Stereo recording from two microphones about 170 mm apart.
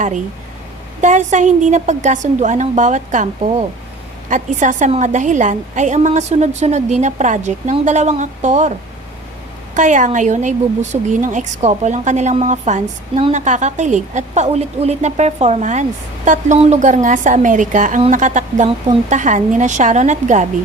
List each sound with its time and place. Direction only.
1.0 s a woman's voice: 45° right (ahead or behind)
4.3 s a woman's voice: 50° right (ahead or behind)
9.7 s a woman's voice: 50° right (ahead or behind)